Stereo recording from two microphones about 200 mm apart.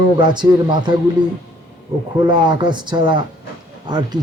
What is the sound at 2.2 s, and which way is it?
A man's voice, 25° right (ahead or behind).